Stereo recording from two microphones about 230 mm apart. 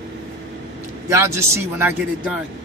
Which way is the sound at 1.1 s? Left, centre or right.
Centre.